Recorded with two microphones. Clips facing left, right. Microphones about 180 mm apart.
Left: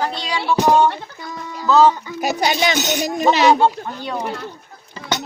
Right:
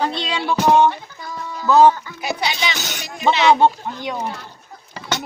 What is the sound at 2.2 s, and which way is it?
Speech, 45° left (ahead or behind).